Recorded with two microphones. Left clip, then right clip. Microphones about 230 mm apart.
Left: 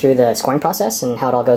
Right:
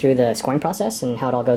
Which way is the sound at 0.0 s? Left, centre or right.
Centre.